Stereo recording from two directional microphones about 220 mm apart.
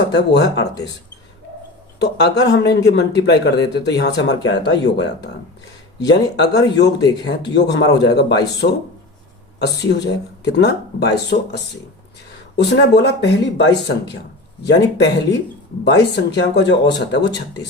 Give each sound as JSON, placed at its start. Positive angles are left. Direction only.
{"t": 0.1, "sound": "a man's voice", "side_deg": 50}
{"t": 2.0, "sound": "a man's voice", "side_deg": 50}
{"t": 6.0, "sound": "a man's voice", "side_deg": 50}